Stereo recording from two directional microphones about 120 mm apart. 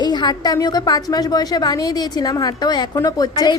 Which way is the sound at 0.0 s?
35° left (ahead or behind).